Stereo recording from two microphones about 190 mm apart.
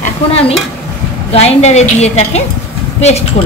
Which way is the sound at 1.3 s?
35° left (ahead or behind).